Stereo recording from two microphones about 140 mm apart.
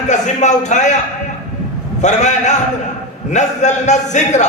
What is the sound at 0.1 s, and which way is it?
Speech, 60° left (ahead or behind).